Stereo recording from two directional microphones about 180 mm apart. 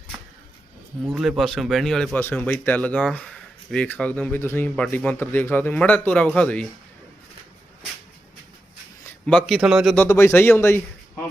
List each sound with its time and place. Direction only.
1.0 s speech: 5° right (ahead or behind)
9.0 s speech: 5° left (ahead or behind)